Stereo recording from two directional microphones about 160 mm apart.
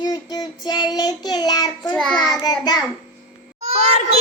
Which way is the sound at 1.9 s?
5° left (ahead or behind).